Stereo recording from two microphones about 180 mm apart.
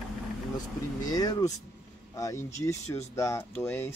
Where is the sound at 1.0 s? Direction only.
20° left (ahead or behind).